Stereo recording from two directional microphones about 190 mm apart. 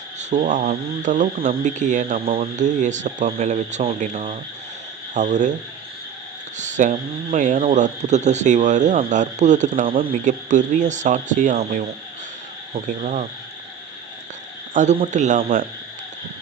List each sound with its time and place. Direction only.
0.2 s speech: 40° right (ahead or behind)
6.6 s speech: 40° right (ahead or behind)
14.7 s speech: 40° right (ahead or behind)